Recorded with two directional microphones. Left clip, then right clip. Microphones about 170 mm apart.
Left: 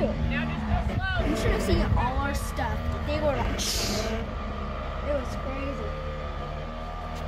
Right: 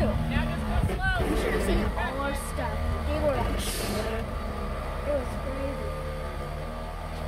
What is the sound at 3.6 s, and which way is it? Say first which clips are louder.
Speech: left 2 dB; 60° left (ahead or behind).